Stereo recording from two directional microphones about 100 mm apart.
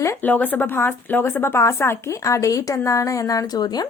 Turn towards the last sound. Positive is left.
turn(degrees=40)  # may be behind; listen again after turning